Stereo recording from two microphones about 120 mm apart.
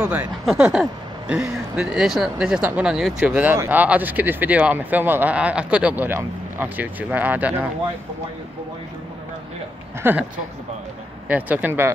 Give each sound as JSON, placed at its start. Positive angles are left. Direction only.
{"t": 0.0, "sound": "speech", "side_deg": -15}
{"t": 10.0, "sound": "speech", "side_deg": -15}
{"t": 11.2, "sound": "speech", "side_deg": -10}